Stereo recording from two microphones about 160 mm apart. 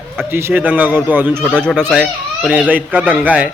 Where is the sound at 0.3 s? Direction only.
15° right (ahead or behind).